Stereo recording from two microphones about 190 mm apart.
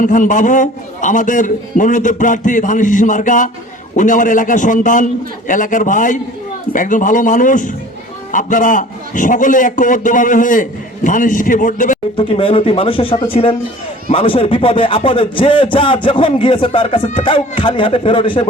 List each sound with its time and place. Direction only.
0.0 s a man's voice: 45° left (ahead or behind)
12.1 s speech: 30° left (ahead or behind)